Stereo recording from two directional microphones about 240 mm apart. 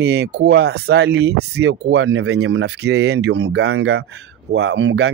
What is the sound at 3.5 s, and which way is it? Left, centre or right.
Speech, right.